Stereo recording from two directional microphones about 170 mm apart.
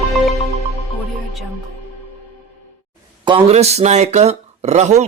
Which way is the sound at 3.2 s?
35° right (ahead or behind).